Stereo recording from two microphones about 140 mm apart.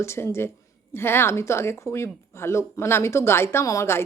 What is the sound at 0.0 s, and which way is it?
A woman's voice, 20° left (ahead or behind).